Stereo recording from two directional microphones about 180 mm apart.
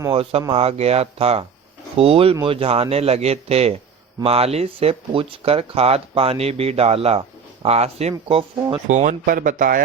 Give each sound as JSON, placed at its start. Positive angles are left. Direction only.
{"t": 0.1, "sound": "speech", "side_deg": -30}